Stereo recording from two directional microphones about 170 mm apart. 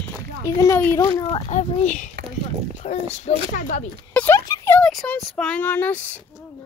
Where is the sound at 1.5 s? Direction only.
45° left (ahead or behind).